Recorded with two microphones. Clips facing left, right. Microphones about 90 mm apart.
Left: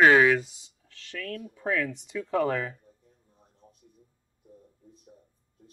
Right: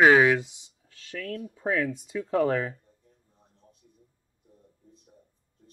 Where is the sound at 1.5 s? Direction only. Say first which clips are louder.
Right 2 dB; 25° right (ahead or behind).